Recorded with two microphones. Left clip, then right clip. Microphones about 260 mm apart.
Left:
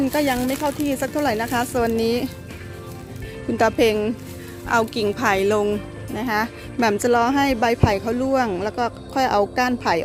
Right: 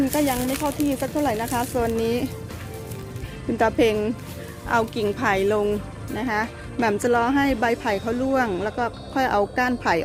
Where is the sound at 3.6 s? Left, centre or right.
Left.